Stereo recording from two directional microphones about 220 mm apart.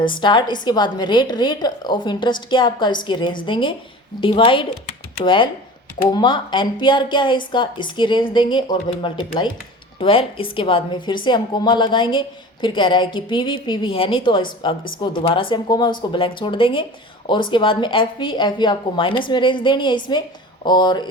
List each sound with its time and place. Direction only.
0.2 s speech: 20° left (ahead or behind)